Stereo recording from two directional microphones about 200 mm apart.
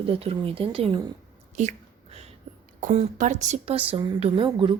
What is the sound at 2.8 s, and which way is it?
Speech, 40° right (ahead or behind).